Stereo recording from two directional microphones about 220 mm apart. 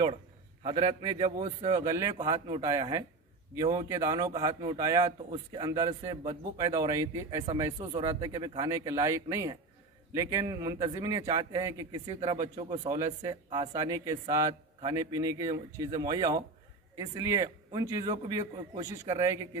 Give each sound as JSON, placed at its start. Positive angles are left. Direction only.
{"t": 0.7, "sound": "a man's voice", "side_deg": -20}
{"t": 7.8, "sound": "a man's voice", "side_deg": -25}